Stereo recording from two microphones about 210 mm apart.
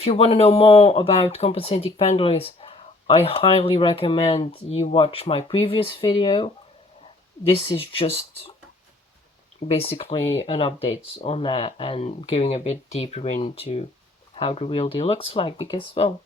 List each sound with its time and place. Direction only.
0.0 s speech: 30° left (ahead or behind)
9.6 s speech: 30° left (ahead or behind)